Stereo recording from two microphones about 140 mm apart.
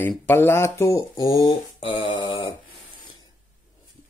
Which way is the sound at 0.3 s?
15° left (ahead or behind).